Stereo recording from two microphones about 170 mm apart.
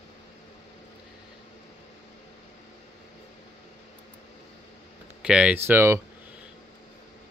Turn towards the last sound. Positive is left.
turn(degrees=-15)  # may be behind; listen again after turning